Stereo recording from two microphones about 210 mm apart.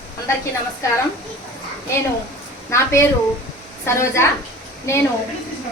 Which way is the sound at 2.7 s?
10° left (ahead or behind).